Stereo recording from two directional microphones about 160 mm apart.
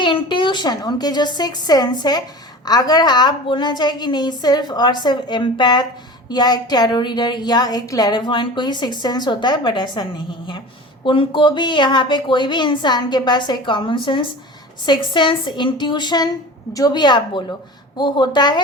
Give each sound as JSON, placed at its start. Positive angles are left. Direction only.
{"t": 0.0, "sound": "a woman's voice", "side_deg": 30}